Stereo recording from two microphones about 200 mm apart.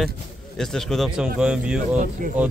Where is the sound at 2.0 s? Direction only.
40° right (ahead or behind).